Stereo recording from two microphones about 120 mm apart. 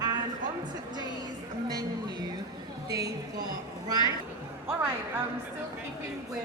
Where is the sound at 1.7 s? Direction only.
35° right (ahead or behind).